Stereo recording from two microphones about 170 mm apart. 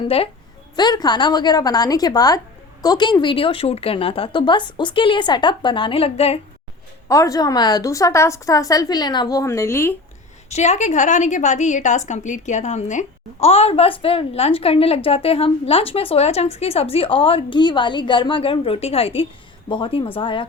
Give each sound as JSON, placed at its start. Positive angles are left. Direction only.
{"t": 0.8, "sound": "a woman's voice", "side_deg": 25}
{"t": 7.1, "sound": "a woman's voice", "side_deg": 20}
{"t": 10.5, "sound": "a woman's voice", "side_deg": 40}